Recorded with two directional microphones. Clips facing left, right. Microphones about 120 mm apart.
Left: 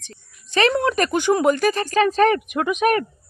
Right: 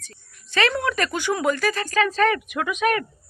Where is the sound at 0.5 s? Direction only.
25° left (ahead or behind).